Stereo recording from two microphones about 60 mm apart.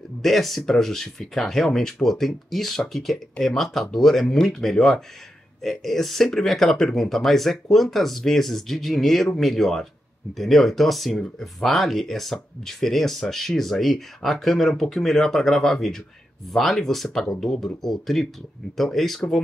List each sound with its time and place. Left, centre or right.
0.2 s speech: centre